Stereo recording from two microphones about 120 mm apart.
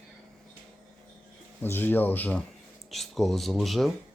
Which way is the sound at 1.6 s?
15° left (ahead or behind).